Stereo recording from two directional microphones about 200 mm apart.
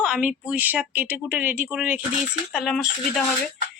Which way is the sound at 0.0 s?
5° right (ahead or behind).